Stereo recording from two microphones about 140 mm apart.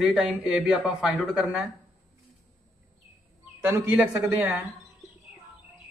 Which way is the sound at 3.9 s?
10° right (ahead or behind).